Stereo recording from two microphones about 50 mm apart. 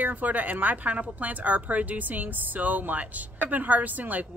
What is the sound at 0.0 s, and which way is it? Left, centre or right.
Speech, right.